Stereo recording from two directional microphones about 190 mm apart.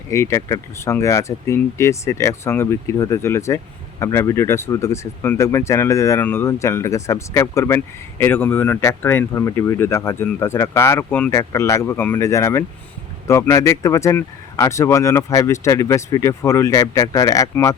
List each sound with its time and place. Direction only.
0.1 s speech: 15° left (ahead or behind)